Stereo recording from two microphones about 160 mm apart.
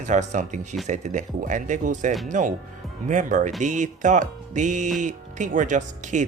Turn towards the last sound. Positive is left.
turn(degrees=-50)  # may be behind; listen again after turning